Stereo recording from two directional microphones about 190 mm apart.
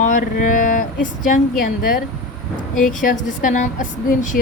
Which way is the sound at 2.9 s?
45° left (ahead or behind).